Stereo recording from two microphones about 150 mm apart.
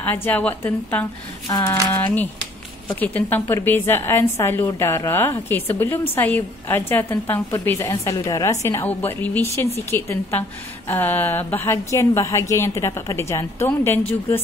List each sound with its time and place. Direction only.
0.0 s a woman's voice: 15° left (ahead or behind)
1.5 s speech: 25° left (ahead or behind)
1.9 s a woman's voice: 10° left (ahead or behind)